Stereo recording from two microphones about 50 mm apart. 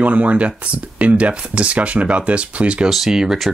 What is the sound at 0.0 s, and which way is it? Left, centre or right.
Speech, right.